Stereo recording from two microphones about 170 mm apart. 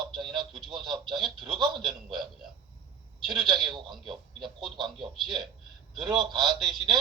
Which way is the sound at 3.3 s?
25° right (ahead or behind).